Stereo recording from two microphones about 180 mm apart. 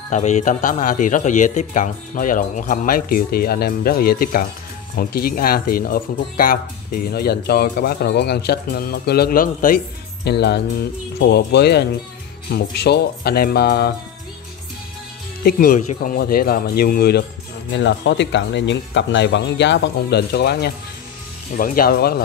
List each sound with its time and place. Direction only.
0.1 s a man's voice: 40° left (ahead or behind)
10.2 s speech: 70° left (ahead or behind)
15.4 s speech: 50° left (ahead or behind)
17.6 s speech: 90° left; by 20.7 s 65° left (ahead or behind)
21.5 s speech: 55° left (ahead or behind)